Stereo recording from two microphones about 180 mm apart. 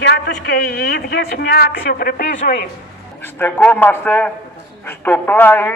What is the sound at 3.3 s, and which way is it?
A man's voice, 10° left (ahead or behind).